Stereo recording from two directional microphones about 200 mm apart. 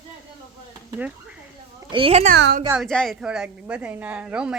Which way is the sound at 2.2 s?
55° right (ahead or behind).